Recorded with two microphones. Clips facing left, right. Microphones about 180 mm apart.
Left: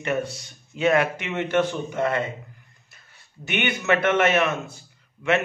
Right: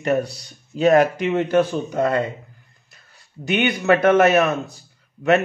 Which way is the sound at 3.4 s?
35° right (ahead or behind).